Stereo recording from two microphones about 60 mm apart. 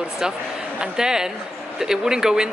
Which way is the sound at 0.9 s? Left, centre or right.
Centre.